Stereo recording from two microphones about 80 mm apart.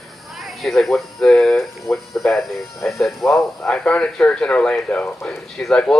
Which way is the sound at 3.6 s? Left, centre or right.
Centre.